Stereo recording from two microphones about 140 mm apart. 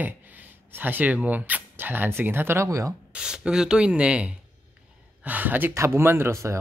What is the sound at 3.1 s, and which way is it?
Speech, 5° right (ahead or behind).